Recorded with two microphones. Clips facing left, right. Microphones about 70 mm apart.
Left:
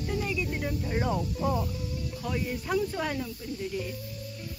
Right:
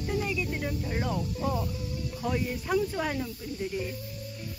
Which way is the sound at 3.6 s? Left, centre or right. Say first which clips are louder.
Right 2 dB; right.